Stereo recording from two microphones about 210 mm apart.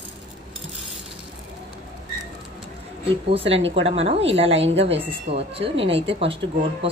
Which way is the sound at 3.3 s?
30° right (ahead or behind).